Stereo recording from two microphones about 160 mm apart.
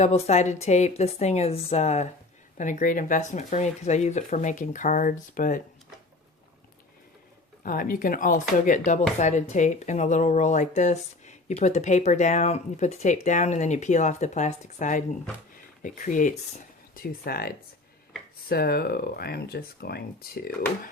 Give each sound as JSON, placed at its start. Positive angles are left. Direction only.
{"t": 0.0, "sound": "speech", "side_deg": 45}
{"t": 7.6, "sound": "speech", "side_deg": 60}
{"t": 16.9, "sound": "speech", "side_deg": 65}